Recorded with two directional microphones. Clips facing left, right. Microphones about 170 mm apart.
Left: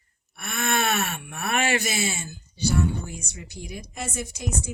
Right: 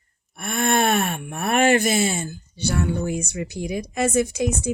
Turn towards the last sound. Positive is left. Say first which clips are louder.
# right 9 dB
turn(degrees=-80)